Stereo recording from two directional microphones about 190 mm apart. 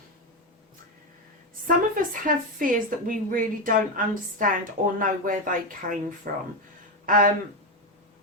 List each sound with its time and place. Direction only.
1.6 s a woman's voice: 45° right (ahead or behind)